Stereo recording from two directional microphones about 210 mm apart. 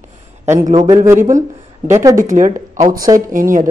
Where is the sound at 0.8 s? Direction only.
15° right (ahead or behind).